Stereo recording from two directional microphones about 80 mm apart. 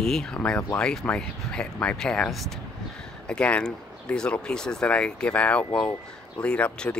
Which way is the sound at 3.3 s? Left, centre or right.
Centre.